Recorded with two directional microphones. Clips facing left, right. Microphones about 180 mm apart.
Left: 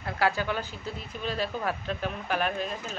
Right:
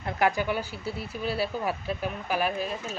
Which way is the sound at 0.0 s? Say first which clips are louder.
Right 2 dB; 15° right (ahead or behind).